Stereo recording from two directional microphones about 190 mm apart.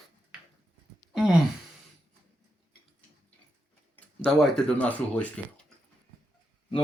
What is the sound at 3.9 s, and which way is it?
Speech, 5° left (ahead or behind).